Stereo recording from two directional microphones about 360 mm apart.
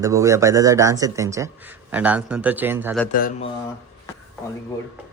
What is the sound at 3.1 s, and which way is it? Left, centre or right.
Speech, left.